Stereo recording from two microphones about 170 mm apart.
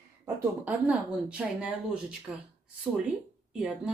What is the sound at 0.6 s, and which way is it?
Speech, 10° right (ahead or behind).